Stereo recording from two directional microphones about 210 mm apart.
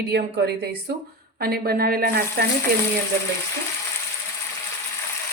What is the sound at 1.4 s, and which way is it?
Speech, 45° right (ahead or behind).